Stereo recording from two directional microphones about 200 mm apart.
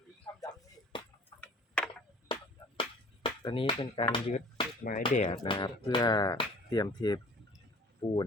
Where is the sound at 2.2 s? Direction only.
25° left (ahead or behind).